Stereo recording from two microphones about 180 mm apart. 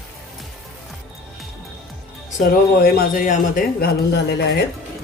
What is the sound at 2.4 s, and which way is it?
A man's voice, 55° left (ahead or behind).